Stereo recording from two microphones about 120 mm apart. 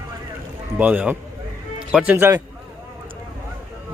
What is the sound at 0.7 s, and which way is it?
Speech, 15° right (ahead or behind).